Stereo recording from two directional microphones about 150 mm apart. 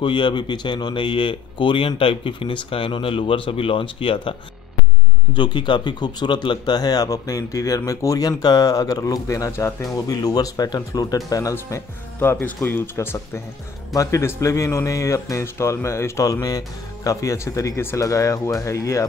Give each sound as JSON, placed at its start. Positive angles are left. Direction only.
{"t": 0.0, "sound": "speech", "side_deg": 30}